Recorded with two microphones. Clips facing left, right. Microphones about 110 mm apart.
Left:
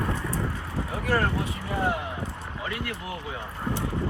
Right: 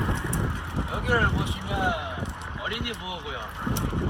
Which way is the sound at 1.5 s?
75° right (ahead or behind).